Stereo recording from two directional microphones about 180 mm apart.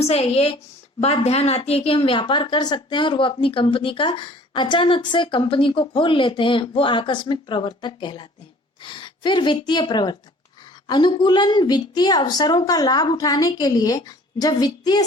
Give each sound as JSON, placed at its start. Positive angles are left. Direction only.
{"t": 0.0, "sound": "a woman's voice", "side_deg": 35}